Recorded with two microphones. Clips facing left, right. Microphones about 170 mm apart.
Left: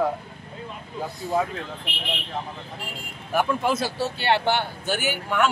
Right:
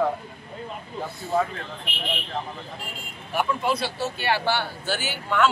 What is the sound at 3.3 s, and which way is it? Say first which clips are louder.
Speech: left 2 dB; 45° left (ahead or behind).